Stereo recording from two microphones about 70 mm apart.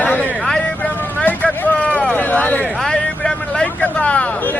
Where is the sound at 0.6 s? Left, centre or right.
Left.